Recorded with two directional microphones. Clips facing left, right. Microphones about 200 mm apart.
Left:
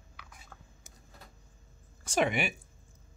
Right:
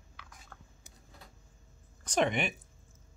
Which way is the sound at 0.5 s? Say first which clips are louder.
Even; 10° left (ahead or behind).